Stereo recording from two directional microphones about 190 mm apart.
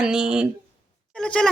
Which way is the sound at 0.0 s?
5° right (ahead or behind).